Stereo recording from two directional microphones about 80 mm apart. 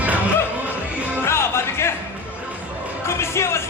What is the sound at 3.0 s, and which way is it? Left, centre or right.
Music, left.